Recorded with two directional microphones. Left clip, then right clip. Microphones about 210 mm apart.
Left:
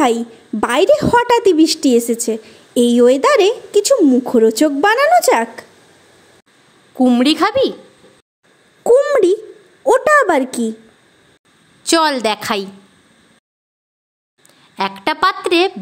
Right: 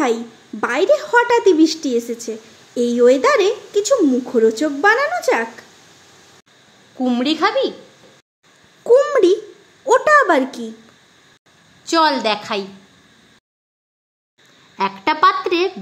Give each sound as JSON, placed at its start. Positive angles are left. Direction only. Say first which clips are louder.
{"t": 0.0, "sound": "a woman's voice", "louder": "left 4 dB", "side_deg": 40}
{"t": 7.0, "sound": "a woman's voice", "louder": "left 5 dB", "side_deg": 35}
{"t": 8.8, "sound": "a woman's voice", "louder": "left 1 dB", "side_deg": 30}
{"t": 11.8, "sound": "a woman's voice", "louder": "left 1 dB", "side_deg": 45}
{"t": 14.8, "sound": "a woman's voice", "louder": "right 1 dB", "side_deg": 50}